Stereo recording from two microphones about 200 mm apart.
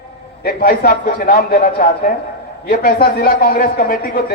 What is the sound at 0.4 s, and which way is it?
A man's voice, 45° left (ahead or behind).